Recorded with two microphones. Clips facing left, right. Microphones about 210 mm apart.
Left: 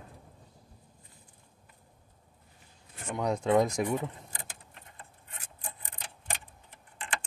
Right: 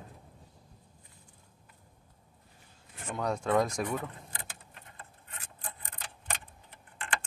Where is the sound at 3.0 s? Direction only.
15° left (ahead or behind).